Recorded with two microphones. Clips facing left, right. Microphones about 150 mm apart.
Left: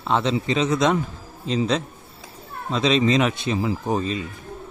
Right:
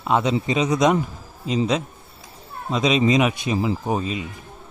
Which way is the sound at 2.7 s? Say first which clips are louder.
Right 1 dB; 10° right (ahead or behind).